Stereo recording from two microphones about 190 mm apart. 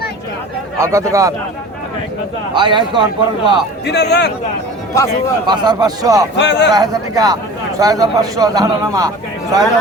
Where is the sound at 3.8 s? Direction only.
65° left (ahead or behind).